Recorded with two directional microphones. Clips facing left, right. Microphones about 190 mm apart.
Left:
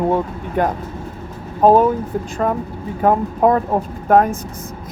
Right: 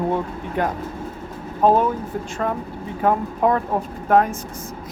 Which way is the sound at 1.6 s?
40° left (ahead or behind).